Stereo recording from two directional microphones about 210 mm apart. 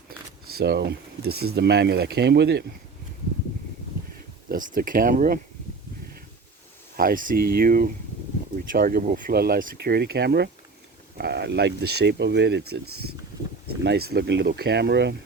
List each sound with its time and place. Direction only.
0.5 s speech: 50° right (ahead or behind)
4.4 s speech: 40° right (ahead or behind)
6.9 s speech: 45° right (ahead or behind)